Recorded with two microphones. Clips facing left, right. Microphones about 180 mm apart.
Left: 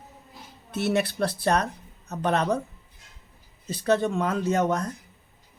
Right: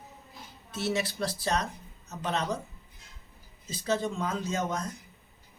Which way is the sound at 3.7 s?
65° left (ahead or behind).